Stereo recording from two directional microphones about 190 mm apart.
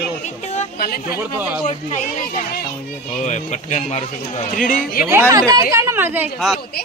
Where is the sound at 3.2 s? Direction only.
40° left (ahead or behind).